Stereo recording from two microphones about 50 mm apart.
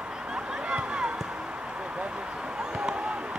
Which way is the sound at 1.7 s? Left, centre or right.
Right.